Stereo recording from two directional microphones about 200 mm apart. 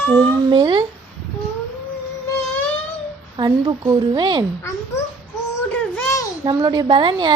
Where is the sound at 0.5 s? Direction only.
25° right (ahead or behind).